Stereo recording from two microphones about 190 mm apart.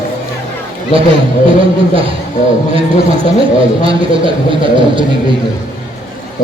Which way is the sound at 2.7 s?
30° right (ahead or behind).